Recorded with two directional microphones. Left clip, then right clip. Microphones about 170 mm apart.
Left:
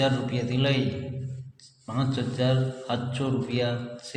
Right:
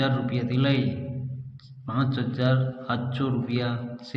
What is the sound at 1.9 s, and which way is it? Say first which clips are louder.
A man's voice: right 1 dB; 15° left (ahead or behind).